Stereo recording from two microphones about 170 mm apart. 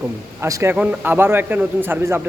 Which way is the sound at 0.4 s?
15° right (ahead or behind).